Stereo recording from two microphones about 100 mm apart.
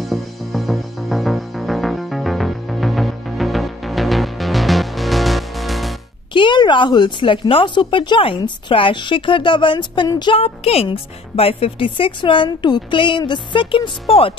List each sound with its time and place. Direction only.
0.1 s music: centre (ahead or behind)
6.3 s a woman's voice: 50° left (ahead or behind)
10.3 s speech: 75° left (ahead or behind)